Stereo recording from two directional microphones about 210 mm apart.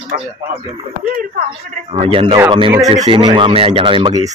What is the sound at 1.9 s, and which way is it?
Speech, 25° right (ahead or behind).